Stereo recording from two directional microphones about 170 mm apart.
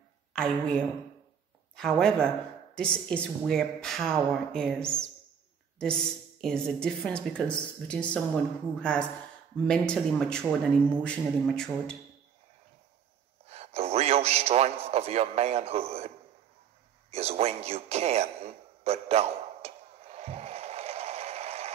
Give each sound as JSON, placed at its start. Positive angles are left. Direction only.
{"t": 0.3, "sound": "a woman's voice", "side_deg": 5}
{"t": 13.5, "sound": "a man's voice", "side_deg": -35}
{"t": 17.1, "sound": "a sound", "side_deg": -35}